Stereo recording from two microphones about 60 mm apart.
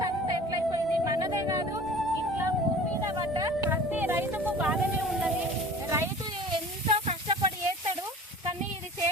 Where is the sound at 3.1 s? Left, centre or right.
Right.